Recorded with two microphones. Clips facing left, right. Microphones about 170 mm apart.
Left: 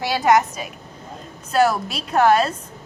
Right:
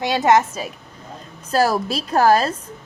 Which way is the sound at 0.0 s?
20° right (ahead or behind).